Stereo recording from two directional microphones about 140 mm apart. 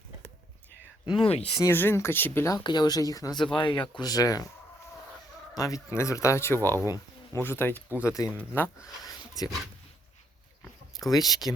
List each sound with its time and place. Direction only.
1.0 s speech: 35° left (ahead or behind)
1.6 s speech: 15° left (ahead or behind)
2.6 s speech: 30° left (ahead or behind)
5.5 s speech: 25° left (ahead or behind)
9.4 s speech: 25° left (ahead or behind)
11.1 s speech: 30° left (ahead or behind)